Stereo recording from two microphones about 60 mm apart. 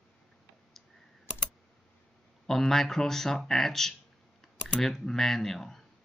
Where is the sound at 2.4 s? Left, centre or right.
Centre.